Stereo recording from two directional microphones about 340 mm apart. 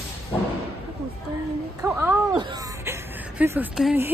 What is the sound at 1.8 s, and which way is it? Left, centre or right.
A woman's voice, centre.